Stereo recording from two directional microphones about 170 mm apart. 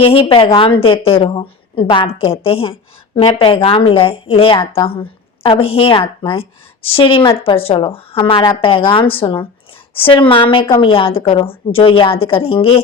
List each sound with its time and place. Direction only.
0.0 s a woman's voice: 35° left (ahead or behind)
4.6 s a woman's voice: 15° left (ahead or behind)
4.9 s a woman's voice: 35° left (ahead or behind)